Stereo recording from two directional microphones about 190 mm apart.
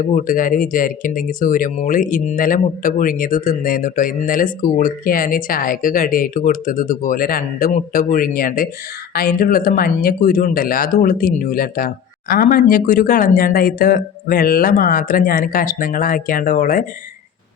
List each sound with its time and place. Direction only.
0.0 s speech: 45° left (ahead or behind)